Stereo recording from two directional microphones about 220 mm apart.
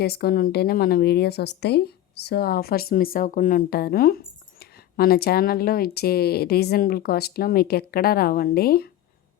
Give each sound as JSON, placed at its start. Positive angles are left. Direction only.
{"t": 0.0, "sound": "a woman's voice", "side_deg": 45}